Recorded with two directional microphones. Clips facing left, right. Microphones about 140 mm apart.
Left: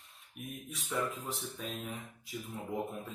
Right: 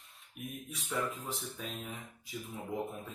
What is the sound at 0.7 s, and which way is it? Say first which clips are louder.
Speech: left 1 dB; centre (ahead or behind).